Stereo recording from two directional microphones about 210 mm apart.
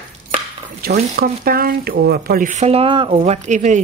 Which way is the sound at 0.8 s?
45° right (ahead or behind).